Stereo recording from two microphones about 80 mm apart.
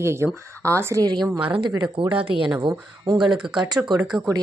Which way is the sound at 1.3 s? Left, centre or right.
Right.